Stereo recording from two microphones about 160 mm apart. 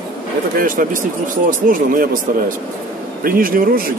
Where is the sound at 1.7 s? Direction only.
60° right (ahead or behind).